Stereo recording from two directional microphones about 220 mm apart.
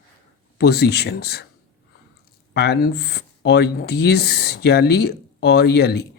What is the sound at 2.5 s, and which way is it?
Speech, 45° left (ahead or behind).